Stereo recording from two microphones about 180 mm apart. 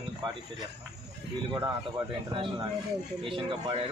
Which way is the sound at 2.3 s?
30° right (ahead or behind).